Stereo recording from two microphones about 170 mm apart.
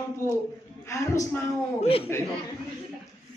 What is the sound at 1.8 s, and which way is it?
Speech, 35° left (ahead or behind).